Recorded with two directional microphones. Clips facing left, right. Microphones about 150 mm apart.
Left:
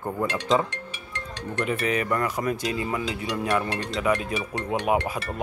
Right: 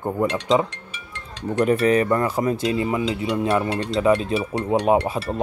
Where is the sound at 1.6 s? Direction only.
40° right (ahead or behind).